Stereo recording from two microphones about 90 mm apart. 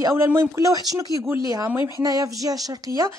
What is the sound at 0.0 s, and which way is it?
A woman's voice, 30° right (ahead or behind).